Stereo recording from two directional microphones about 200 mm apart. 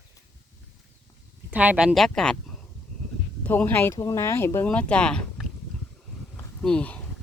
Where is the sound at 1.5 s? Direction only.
5° right (ahead or behind).